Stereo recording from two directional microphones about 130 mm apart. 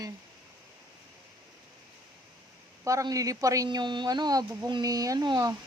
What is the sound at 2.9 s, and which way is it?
A woman's voice, 25° right (ahead or behind).